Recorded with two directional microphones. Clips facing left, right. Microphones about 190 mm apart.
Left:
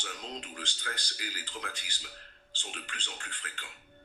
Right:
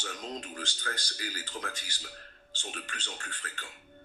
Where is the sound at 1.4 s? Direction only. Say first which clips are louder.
Right 3 dB; 45° right (ahead or behind).